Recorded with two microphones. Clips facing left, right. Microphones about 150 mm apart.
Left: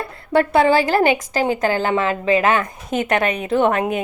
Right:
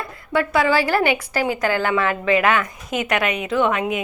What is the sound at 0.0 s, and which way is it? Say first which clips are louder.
A woman's voice: left 4 dB; 30° left (ahead or behind).